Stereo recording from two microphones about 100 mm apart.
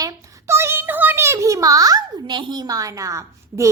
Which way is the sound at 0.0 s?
30° right (ahead or behind).